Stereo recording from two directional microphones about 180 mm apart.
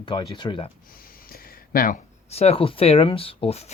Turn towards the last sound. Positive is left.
turn(degrees=35)  # may be behind; listen again after turning